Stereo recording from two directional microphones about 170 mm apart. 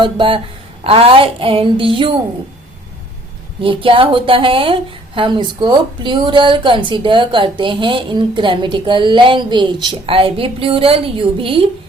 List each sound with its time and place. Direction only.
0.0 s a woman's voice: 30° right (ahead or behind)
3.6 s speech: 30° right (ahead or behind)